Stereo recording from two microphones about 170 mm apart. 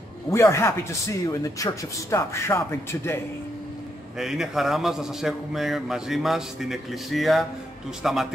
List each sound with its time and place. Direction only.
0.3 s speech: 15° left (ahead or behind)
4.2 s a man's voice: centre (ahead or behind)